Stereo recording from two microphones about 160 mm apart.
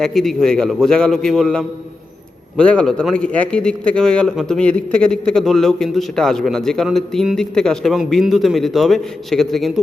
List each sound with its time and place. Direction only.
0.0 s a man's voice: centre (ahead or behind)